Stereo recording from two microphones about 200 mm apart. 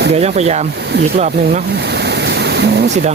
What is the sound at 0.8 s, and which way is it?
Speech, 55° right (ahead or behind).